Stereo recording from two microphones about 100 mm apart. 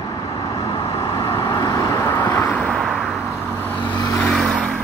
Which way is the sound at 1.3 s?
35° left (ahead or behind).